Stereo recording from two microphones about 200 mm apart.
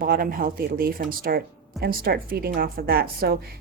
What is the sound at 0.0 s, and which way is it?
Speech, 45° right (ahead or behind).